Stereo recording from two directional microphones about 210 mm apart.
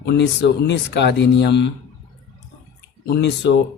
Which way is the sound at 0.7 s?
55° left (ahead or behind).